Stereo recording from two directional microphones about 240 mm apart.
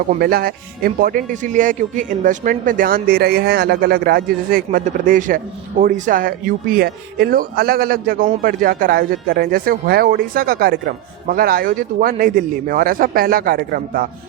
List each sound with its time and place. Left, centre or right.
0.1 s speech: right